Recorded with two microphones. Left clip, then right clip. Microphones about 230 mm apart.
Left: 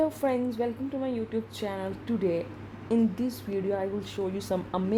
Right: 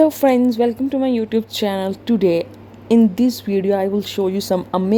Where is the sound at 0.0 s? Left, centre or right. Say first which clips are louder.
Right 13 dB; right.